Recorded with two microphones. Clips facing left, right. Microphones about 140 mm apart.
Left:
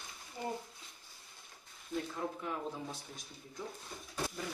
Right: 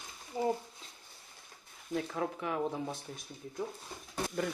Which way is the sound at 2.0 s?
90° right.